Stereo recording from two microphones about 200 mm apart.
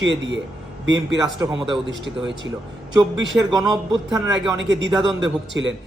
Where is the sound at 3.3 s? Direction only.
5° right (ahead or behind).